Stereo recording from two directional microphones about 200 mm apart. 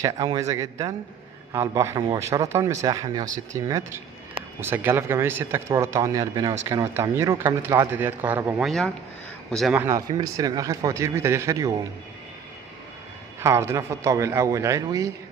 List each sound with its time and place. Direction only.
0.0 s speech: 20° right (ahead or behind); by 9.8 s centre (ahead or behind)
9.8 s speech: 15° right (ahead or behind)
13.4 s speech: 15° right (ahead or behind)